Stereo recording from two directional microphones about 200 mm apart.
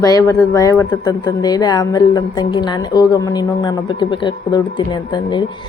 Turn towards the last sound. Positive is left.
turn(degrees=20)  # may be behind; listen again after turning